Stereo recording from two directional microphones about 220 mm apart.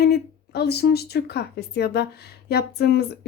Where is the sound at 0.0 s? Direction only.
45° left (ahead or behind).